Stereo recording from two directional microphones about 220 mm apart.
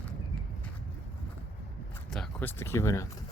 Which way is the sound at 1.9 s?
5° left (ahead or behind).